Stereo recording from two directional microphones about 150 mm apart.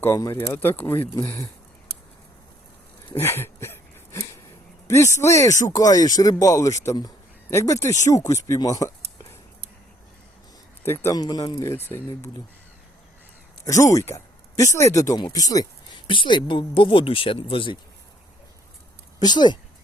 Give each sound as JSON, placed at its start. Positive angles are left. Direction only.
{"t": 0.0, "sound": "speech", "side_deg": 20}
{"t": 3.2, "sound": "a sound", "side_deg": 15}
{"t": 4.9, "sound": "speech", "side_deg": 20}
{"t": 10.8, "sound": "speech", "side_deg": 20}
{"t": 11.6, "sound": "speech", "side_deg": 15}
{"t": 13.7, "sound": "speech", "side_deg": 20}
{"t": 19.2, "sound": "speech", "side_deg": 30}